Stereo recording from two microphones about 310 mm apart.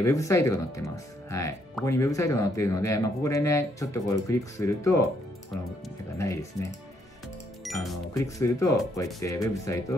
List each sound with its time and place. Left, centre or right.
0.0 s speech: centre
6.1 s speech: centre